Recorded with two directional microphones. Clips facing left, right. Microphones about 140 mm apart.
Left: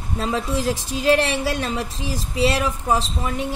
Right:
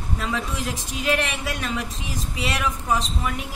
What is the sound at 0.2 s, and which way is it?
A woman's voice, 30° left (ahead or behind).